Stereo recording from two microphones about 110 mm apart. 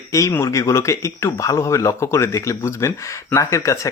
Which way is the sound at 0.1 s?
30° left (ahead or behind).